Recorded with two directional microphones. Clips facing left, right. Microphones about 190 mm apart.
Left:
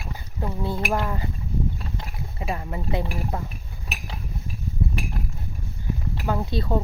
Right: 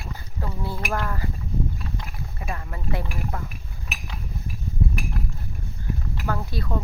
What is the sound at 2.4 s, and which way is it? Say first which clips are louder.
Speech: left 5 dB; 20° left (ahead or behind).